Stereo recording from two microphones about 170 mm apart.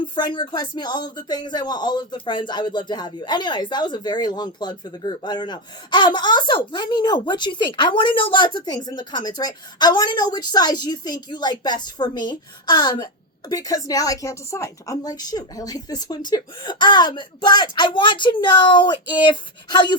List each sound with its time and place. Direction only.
0.0 s speech: 25° left (ahead or behind)